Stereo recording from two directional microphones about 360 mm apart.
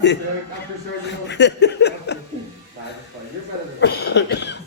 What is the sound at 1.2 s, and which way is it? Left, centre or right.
Speech, left.